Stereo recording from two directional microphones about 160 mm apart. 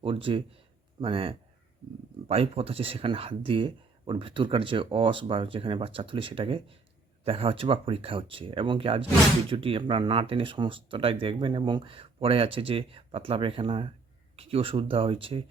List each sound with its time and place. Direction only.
0.0 s speech: 35° right (ahead or behind)